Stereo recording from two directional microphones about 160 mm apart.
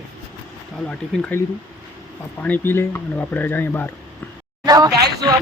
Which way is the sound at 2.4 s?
10° left (ahead or behind).